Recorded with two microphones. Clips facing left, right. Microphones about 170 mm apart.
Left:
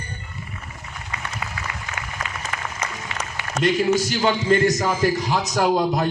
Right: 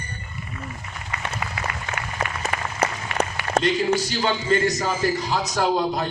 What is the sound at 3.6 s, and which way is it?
A man's voice, 45° left (ahead or behind).